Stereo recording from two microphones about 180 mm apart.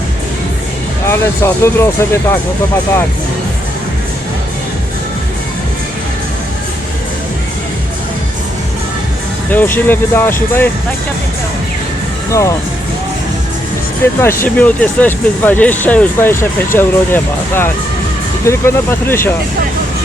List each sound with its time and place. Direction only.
1.0 s speech: 15° left (ahead or behind)
9.5 s speech: 10° left (ahead or behind)
12.3 s speech: 15° left (ahead or behind)
14.0 s speech: 15° left (ahead or behind)